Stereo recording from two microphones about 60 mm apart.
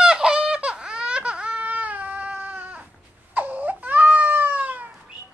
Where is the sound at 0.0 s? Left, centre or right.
Centre; by 4.8 s right.